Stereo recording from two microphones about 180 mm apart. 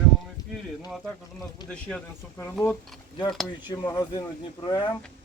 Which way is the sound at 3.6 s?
25° left (ahead or behind).